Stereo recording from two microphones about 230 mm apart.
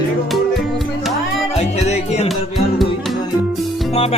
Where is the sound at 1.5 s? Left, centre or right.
Left.